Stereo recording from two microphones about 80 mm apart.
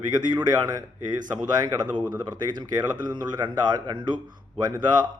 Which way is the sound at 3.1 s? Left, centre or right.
Right.